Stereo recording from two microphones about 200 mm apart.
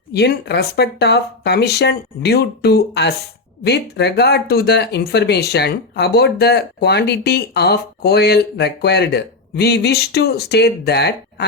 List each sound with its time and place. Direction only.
0.1 s speech: 55° left (ahead or behind)